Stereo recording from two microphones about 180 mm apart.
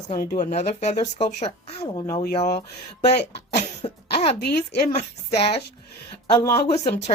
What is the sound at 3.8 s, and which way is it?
Speech, 30° left (ahead or behind).